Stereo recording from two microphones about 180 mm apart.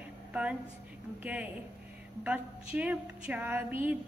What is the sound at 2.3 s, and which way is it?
A woman's voice, 10° right (ahead or behind).